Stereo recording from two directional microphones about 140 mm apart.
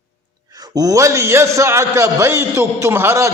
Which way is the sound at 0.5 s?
30° right (ahead or behind).